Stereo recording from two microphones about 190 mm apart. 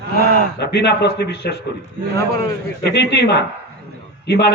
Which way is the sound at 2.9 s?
60° left (ahead or behind).